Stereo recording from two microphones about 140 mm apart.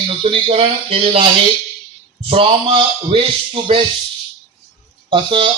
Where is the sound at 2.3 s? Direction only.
40° right (ahead or behind).